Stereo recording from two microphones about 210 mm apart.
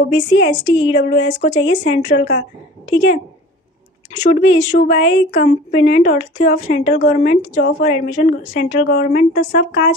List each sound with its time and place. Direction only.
0.4 s a woman's voice: 30° left (ahead or behind)
4.2 s a woman's voice: 30° left (ahead or behind)